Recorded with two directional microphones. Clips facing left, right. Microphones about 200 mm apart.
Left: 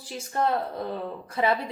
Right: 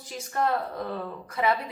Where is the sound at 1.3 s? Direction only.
30° left (ahead or behind).